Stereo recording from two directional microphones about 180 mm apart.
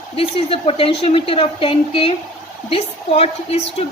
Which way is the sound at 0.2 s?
35° left (ahead or behind).